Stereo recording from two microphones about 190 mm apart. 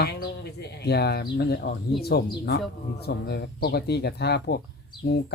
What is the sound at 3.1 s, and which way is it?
Speech, 60° left (ahead or behind).